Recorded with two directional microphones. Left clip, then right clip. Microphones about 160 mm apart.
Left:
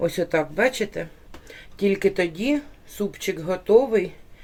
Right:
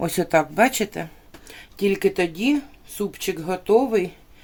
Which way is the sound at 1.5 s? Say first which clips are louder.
Even; 30° right (ahead or behind).